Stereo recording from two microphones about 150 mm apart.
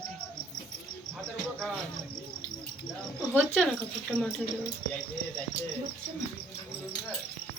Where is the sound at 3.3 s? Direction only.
10° left (ahead or behind).